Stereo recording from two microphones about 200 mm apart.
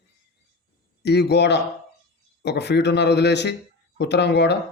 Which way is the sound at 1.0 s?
55° left (ahead or behind).